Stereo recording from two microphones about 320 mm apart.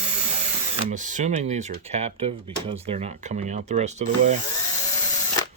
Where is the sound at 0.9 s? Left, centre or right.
Right.